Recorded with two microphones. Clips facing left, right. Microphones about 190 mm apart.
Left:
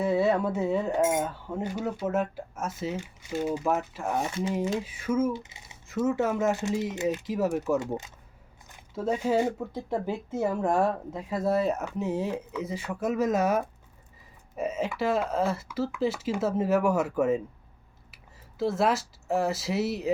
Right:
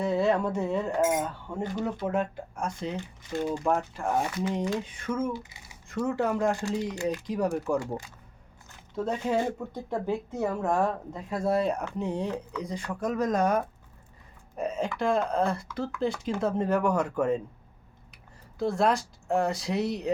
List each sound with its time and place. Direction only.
0.0 s speech: 5° left (ahead or behind)
0.9 s speech: 25° left (ahead or behind)
1.5 s speech: 5° left (ahead or behind)
4.2 s speech: 25° left (ahead or behind)
4.9 s speech: 5° left (ahead or behind)
5.3 s typing: 20° left (ahead or behind)
6.1 s speech: 5° left (ahead or behind)
7.8 s speech: 20° left (ahead or behind)
9.0 s speech: 5° left (ahead or behind)
18.6 s speech: 5° left (ahead or behind)